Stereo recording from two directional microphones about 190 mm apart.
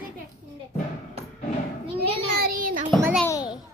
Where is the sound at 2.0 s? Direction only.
50° right (ahead or behind).